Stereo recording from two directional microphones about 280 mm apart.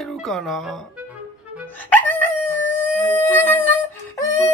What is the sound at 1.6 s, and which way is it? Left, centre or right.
Dog, centre.